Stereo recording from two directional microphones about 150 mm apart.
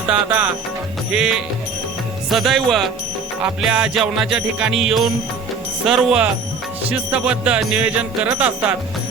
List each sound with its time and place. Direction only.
0.1 s music: 10° right (ahead or behind)
2.3 s music: centre (ahead or behind)